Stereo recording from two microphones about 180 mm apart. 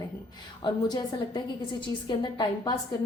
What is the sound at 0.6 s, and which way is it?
A woman's voice, 25° left (ahead or behind).